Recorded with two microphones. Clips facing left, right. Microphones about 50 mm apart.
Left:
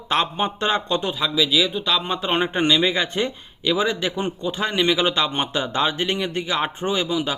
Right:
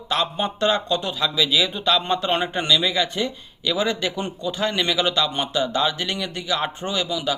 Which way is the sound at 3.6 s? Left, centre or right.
Centre.